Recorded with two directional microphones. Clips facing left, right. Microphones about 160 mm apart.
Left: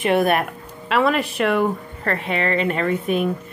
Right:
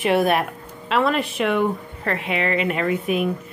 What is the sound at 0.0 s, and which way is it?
A woman's voice, centre (ahead or behind).